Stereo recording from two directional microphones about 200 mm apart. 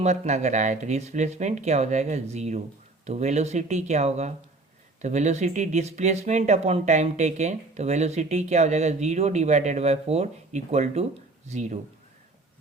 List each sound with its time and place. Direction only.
0.0 s speech: 35° right (ahead or behind)